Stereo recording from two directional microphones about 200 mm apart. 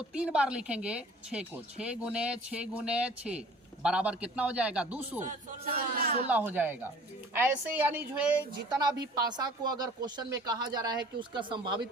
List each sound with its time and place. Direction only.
0.1 s speech: 5° right (ahead or behind)
5.2 s speech: 45° right (ahead or behind)
6.2 s a woman's voice: 10° right (ahead or behind)
9.1 s speech: 20° right (ahead or behind)